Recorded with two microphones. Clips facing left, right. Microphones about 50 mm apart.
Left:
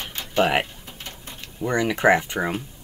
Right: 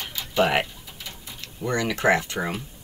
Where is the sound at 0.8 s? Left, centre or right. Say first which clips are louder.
Left 2 dB; left.